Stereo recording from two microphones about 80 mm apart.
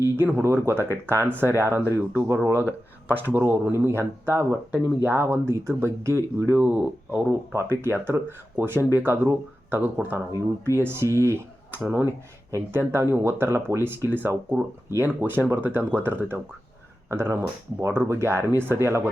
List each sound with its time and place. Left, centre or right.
0.0 s a sound: right
0.4 s speech: right
2.6 s speech: left
3.3 s speech: right
6.6 s speech: right
7.5 s speech: right